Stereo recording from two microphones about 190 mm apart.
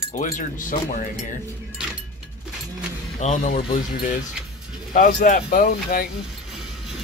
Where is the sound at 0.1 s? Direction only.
45° left (ahead or behind).